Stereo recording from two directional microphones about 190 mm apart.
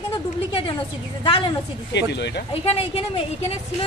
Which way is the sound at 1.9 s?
65° left (ahead or behind).